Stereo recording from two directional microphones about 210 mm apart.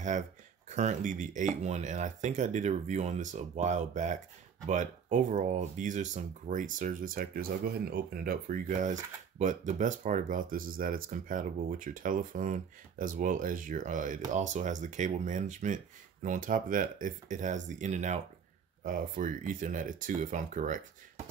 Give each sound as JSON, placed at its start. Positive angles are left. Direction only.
{"t": 0.7, "sound": "speech", "side_deg": -35}